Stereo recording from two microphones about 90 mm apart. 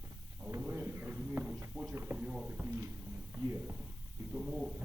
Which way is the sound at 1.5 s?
5° right (ahead or behind).